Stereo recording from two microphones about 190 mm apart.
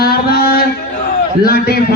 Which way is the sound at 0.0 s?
55° left (ahead or behind).